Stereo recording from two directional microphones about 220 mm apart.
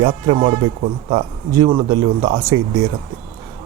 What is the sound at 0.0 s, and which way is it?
A man's voice, 25° right (ahead or behind).